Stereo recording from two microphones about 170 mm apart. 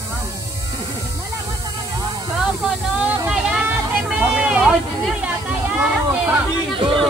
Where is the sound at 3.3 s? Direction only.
5° right (ahead or behind).